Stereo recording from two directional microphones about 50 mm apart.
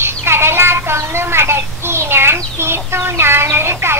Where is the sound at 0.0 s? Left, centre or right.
Right.